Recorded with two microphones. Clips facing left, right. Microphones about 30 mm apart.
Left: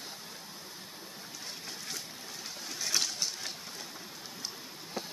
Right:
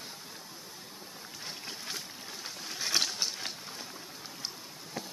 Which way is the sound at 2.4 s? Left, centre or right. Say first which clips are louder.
Right 2 dB; centre.